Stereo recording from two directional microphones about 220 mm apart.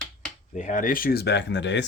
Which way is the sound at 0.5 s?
35° left (ahead or behind).